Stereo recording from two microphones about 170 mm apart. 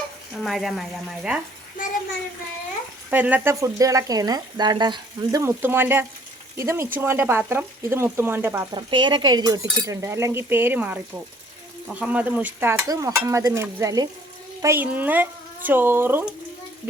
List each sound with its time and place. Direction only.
0.3 s speech: centre (ahead or behind)
3.1 s speech: 10° right (ahead or behind)
8.7 s speech: 25° right (ahead or behind)